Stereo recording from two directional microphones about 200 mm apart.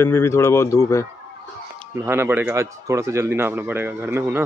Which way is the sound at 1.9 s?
10° right (ahead or behind).